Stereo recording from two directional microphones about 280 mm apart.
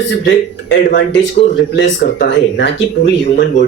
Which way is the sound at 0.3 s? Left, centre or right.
Left.